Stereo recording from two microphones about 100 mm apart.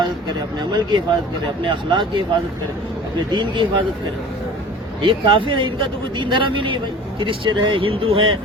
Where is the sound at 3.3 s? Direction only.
55° right (ahead or behind).